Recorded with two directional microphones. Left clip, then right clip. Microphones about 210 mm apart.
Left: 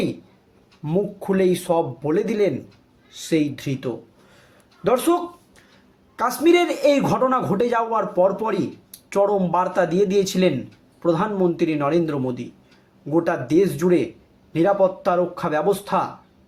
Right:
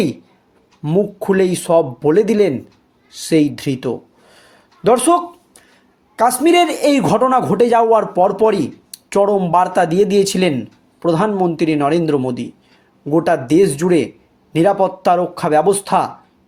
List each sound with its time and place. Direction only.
0.8 s a man's voice: 40° right (ahead or behind)